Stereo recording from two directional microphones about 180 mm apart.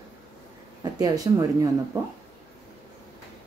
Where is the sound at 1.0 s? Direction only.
20° right (ahead or behind).